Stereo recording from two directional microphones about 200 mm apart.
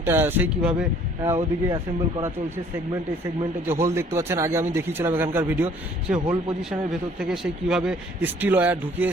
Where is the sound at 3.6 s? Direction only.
15° right (ahead or behind).